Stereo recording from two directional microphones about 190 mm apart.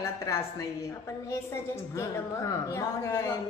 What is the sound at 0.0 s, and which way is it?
Speech, 15° left (ahead or behind).